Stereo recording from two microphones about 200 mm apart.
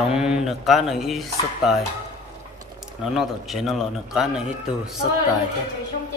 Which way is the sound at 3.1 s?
Centre (ahead or behind).